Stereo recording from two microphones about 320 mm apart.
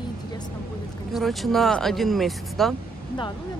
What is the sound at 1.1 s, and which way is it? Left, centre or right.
Speech, centre.